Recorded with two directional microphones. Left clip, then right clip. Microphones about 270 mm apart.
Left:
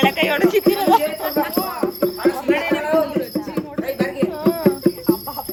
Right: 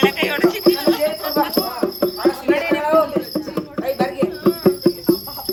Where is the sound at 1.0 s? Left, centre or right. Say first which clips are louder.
Right 2 dB; centre.